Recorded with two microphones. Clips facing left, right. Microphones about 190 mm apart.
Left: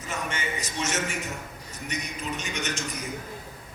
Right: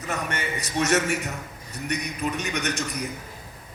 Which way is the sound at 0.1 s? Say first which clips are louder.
Right 3 dB; 65° right (ahead or behind).